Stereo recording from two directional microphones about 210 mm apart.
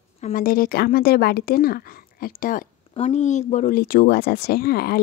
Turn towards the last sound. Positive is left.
turn(degrees=45)  # may be behind; listen again after turning